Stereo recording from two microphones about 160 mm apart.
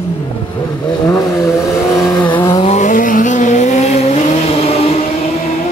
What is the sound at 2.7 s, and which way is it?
Vehicle, 50° left (ahead or behind).